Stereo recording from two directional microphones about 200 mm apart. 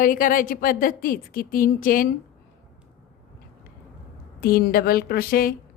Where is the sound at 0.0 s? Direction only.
45° left (ahead or behind).